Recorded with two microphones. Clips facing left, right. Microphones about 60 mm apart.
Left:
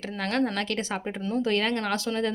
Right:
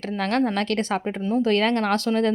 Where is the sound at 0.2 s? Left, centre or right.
Right.